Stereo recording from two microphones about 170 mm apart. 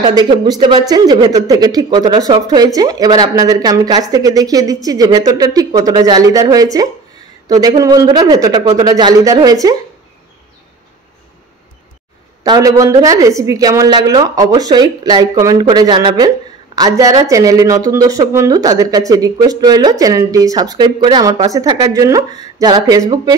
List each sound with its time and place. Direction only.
0.0 s speech: 25° right (ahead or behind)
12.4 s speech: 20° right (ahead or behind)